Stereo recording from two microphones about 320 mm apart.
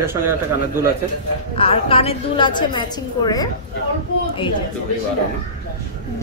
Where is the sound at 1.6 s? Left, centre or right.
Centre.